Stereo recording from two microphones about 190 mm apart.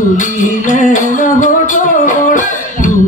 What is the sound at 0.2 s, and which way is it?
Music, 40° left (ahead or behind).